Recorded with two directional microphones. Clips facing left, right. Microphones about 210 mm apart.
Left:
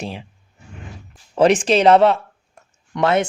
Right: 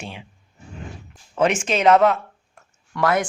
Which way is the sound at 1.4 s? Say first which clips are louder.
Left 6 dB; 35° left (ahead or behind).